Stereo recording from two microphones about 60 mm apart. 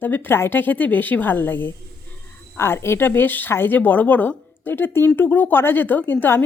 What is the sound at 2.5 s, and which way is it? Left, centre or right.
Speech, left.